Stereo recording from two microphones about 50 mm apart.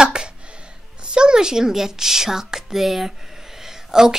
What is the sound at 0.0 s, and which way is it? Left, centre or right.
Speech, centre.